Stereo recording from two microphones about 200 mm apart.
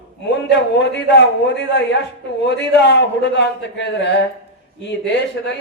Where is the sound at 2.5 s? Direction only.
60° left (ahead or behind).